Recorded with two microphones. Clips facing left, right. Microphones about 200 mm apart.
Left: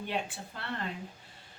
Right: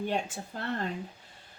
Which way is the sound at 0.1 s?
45° right (ahead or behind).